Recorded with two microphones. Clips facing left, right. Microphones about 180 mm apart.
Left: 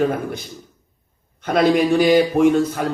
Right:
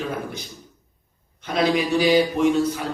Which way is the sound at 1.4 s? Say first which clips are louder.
Left 5 dB; 50° left (ahead or behind).